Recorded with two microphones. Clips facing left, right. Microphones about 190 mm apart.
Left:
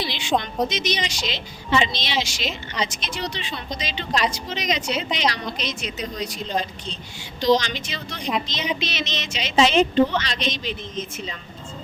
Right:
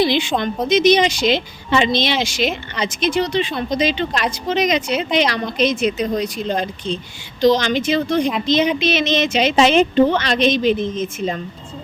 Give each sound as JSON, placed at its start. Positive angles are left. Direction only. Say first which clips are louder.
{"t": 0.0, "sound": "a woman's voice", "louder": "right 7 dB", "side_deg": -55}